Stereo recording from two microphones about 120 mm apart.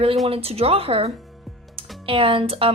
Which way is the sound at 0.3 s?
55° right (ahead or behind).